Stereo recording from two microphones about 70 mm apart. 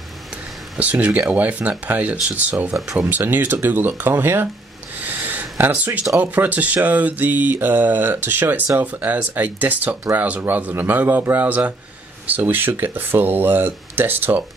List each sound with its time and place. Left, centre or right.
0.7 s speech: centre
4.9 s a sound: right
6.1 s speech: right